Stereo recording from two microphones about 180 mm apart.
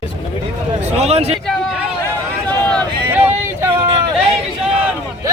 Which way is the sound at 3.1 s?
10° right (ahead or behind).